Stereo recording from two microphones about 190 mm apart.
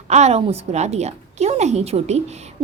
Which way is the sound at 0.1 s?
35° right (ahead or behind).